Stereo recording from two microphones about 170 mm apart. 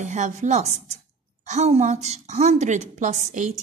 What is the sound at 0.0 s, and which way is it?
A woman's voice, 45° right (ahead or behind).